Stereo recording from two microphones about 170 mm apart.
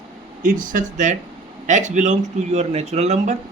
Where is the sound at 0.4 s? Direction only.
50° right (ahead or behind).